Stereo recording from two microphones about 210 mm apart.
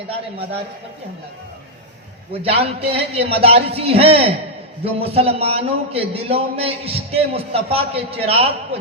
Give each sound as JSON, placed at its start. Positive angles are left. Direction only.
{"t": 2.3, "sound": "a man's voice", "side_deg": -30}